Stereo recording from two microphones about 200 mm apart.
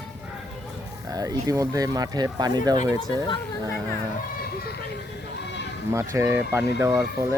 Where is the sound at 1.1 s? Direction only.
15° right (ahead or behind).